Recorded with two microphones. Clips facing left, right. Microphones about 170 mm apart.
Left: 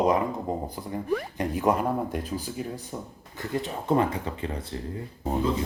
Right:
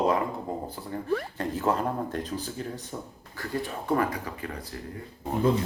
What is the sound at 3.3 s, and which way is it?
Speech, 20° left (ahead or behind).